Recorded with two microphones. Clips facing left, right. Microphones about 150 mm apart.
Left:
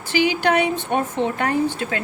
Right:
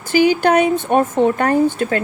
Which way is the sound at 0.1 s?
45° right (ahead or behind).